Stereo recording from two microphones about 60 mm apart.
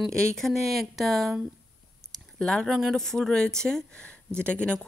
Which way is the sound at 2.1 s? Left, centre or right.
Centre.